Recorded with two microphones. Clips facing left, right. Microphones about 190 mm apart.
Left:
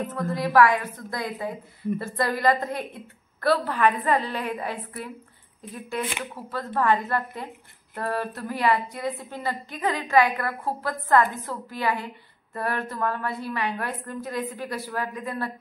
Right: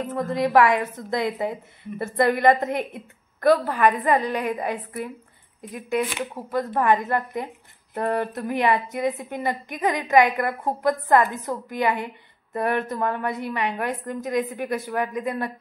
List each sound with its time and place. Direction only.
0.1 s a woman's voice: 20° right (ahead or behind)